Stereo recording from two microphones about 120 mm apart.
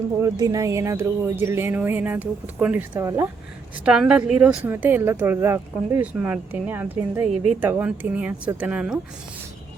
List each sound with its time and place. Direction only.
0.2 s speech: 30° right (ahead or behind); by 3.0 s 15° right (ahead or behind)
3.0 s speech: 25° right (ahead or behind)
3.8 s speech: 10° right (ahead or behind)